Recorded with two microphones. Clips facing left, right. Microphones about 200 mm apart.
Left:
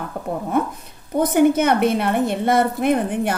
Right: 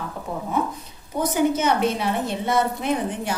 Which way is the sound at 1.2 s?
55° left (ahead or behind).